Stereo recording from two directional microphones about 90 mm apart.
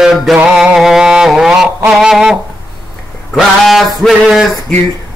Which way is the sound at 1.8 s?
5° right (ahead or behind).